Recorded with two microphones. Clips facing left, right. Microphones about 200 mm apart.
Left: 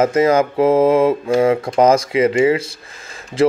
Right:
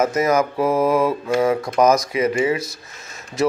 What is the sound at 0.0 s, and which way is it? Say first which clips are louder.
Speech: left 4 dB; 30° left (ahead or behind).